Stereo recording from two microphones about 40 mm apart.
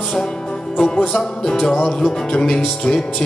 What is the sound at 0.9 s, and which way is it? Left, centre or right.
Music, left.